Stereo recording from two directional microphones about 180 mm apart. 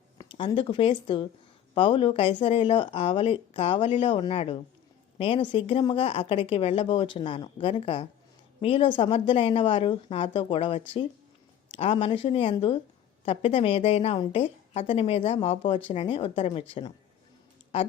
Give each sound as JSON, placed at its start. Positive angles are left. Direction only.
{"t": 0.2, "sound": "a woman's voice", "side_deg": 30}